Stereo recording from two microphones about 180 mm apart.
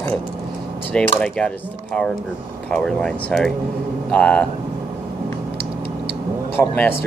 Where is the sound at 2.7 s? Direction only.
5° left (ahead or behind).